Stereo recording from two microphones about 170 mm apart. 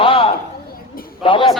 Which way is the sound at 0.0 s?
30° left (ahead or behind).